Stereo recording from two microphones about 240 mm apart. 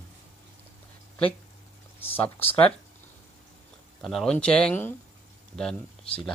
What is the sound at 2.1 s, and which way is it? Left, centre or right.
Speech, centre.